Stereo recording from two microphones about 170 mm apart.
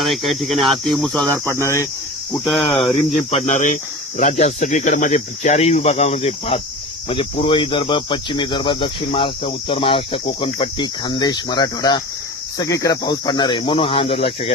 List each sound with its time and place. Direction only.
0.0 s speech: centre (ahead or behind); by 1.9 s 15° left (ahead or behind)
2.6 s speech: 35° left (ahead or behind)